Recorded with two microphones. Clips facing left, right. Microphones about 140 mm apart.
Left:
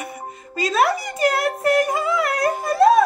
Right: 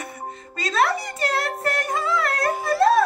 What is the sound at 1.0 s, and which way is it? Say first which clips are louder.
Music: left 5 dB; 20° left (ahead or behind).